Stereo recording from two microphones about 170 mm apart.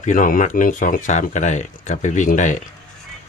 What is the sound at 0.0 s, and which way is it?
Speech, 50° left (ahead or behind).